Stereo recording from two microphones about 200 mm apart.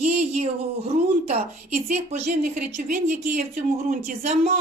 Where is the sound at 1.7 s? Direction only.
35° right (ahead or behind).